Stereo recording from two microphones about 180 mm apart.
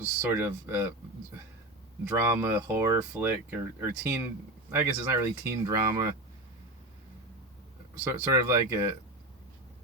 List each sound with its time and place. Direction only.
0.2 s speech: 10° right (ahead or behind)
2.0 s speech: 15° right (ahead or behind)
8.0 s speech: 15° right (ahead or behind)